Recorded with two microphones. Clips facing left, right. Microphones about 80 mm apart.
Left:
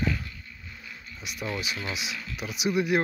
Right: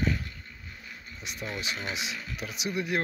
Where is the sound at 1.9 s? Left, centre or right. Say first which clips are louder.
Even; right.